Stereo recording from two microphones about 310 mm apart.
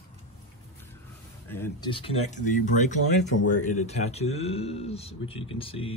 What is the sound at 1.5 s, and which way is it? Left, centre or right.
Speech, centre.